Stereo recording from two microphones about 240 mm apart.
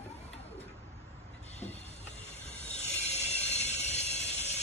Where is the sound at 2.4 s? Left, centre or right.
Left.